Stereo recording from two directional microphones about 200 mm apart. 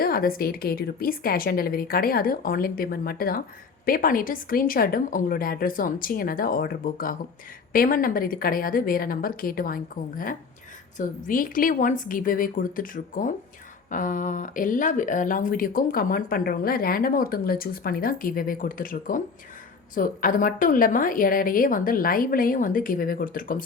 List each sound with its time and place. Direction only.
0.0 s speech: 45° left (ahead or behind)